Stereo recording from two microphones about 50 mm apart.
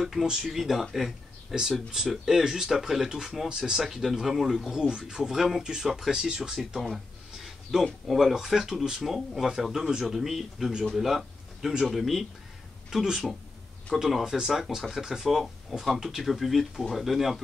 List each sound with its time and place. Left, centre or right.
0.0 s speech: centre
7.8 s speech: centre